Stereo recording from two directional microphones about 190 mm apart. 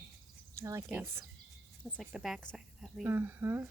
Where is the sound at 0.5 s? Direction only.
15° right (ahead or behind); by 2.9 s centre (ahead or behind).